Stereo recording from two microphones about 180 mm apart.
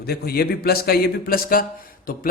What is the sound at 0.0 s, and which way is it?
A man's voice, 60° left (ahead or behind).